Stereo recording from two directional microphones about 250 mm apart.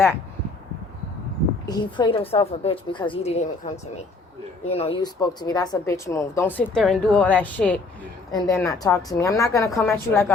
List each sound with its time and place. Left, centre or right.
1.6 s a woman's voice: centre